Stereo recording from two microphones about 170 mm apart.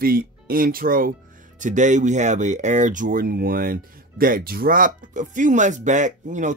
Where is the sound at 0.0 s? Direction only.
60° right (ahead or behind).